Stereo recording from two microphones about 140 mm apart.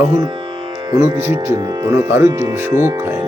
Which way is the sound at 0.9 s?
20° right (ahead or behind).